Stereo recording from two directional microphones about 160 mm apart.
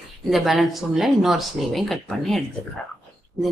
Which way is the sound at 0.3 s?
Centre (ahead or behind).